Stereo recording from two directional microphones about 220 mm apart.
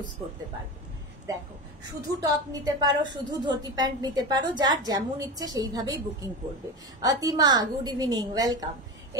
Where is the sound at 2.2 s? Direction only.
15° right (ahead or behind).